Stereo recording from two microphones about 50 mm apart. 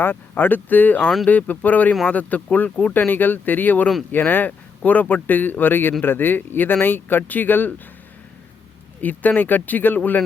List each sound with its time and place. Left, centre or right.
0.0 s speech: left
2.6 s speech: centre
2.9 s speech: left
9.0 s speech: left